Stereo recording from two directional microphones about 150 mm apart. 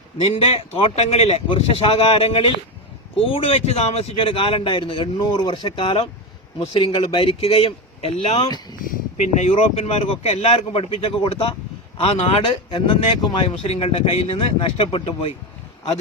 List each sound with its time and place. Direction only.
0.3 s speech: 40° left (ahead or behind)
8.8 s a sound: 65° left (ahead or behind)
9.2 s speech: 50° left (ahead or behind)